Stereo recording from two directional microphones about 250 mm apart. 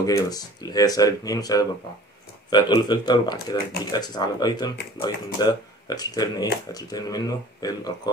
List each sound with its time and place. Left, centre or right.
0.0 s speech: centre